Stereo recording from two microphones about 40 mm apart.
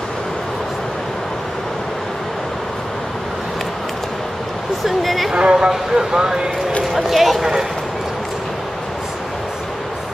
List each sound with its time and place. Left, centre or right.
4.8 s speech: centre
5.3 s speech: right
6.8 s speech: centre